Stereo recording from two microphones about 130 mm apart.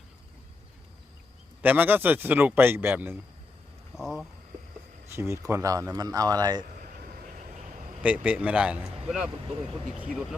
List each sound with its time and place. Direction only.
1.6 s speech: 15° right (ahead or behind)
3.9 s speech: centre (ahead or behind)
5.1 s speech: 20° right (ahead or behind)
8.0 s speech: 10° right (ahead or behind)